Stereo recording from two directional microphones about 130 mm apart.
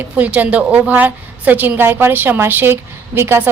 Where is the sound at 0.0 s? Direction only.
10° right (ahead or behind).